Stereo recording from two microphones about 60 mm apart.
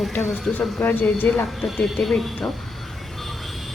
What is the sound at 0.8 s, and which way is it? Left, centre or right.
Speech, left.